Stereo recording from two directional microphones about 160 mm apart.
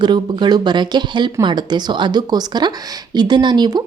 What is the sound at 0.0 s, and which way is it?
Speech, 30° right (ahead or behind).